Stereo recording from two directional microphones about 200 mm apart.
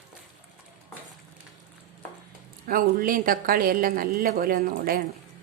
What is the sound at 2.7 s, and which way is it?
Speech, 45° right (ahead or behind).